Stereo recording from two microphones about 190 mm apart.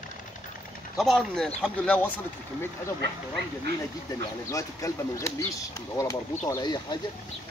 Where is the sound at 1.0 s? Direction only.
Centre (ahead or behind).